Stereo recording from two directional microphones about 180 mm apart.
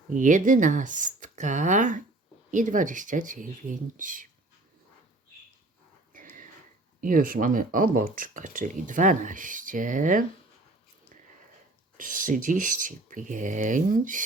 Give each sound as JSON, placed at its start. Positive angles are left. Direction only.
{"t": 0.1, "sound": "speech", "side_deg": -45}
{"t": 7.0, "sound": "speech", "side_deg": -50}
{"t": 11.9, "sound": "speech", "side_deg": -50}